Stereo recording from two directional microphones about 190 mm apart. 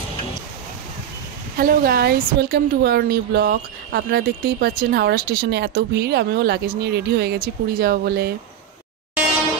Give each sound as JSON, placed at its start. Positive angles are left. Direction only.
{"t": 1.6, "sound": "a woman's voice", "side_deg": -50}